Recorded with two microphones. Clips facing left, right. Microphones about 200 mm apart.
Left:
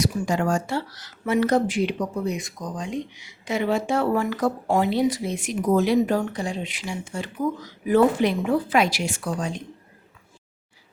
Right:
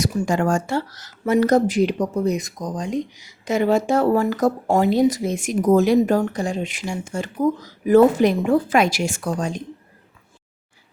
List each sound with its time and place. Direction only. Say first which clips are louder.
0.0 s speech: right 3 dB; 50° right (ahead or behind)